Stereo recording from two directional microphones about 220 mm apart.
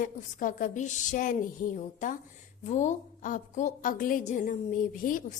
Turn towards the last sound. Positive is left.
turn(degrees=35)  # may be behind; listen again after turning